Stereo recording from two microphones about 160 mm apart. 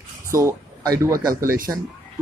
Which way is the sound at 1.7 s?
10° right (ahead or behind).